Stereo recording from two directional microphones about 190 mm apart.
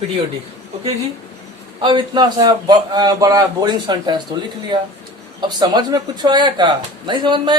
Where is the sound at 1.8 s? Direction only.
25° right (ahead or behind).